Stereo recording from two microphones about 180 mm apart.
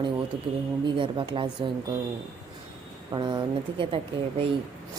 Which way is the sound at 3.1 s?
25° right (ahead or behind).